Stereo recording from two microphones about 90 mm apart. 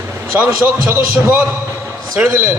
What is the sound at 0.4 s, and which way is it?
Speech, 25° right (ahead or behind).